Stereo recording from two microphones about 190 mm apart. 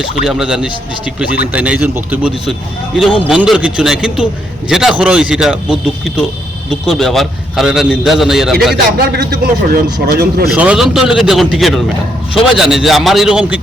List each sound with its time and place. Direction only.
0.3 s a man's voice: 5° right (ahead or behind)
8.7 s a man's voice: 55° right (ahead or behind)
10.4 s a man's voice: 5° right (ahead or behind)